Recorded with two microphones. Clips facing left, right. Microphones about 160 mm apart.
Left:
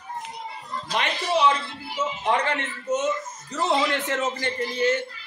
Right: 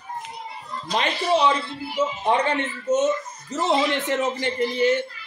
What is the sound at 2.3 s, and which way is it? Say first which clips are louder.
A man's voice: right 3 dB; 25° right (ahead or behind).